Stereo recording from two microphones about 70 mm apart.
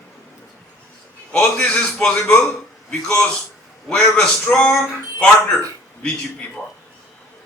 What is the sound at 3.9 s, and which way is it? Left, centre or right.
Speech, centre.